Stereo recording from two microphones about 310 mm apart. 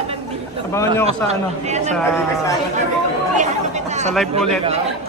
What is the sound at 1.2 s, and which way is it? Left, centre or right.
Speech, right.